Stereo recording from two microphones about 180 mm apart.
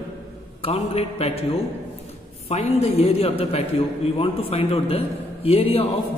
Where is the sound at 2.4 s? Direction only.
35° left (ahead or behind).